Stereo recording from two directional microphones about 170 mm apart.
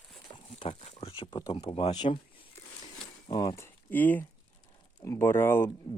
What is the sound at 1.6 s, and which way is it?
Speech, 30° left (ahead or behind).